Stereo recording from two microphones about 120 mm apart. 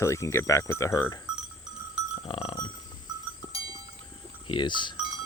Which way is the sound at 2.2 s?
50° left (ahead or behind).